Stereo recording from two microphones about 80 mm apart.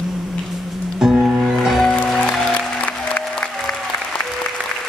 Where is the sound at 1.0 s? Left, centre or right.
Centre.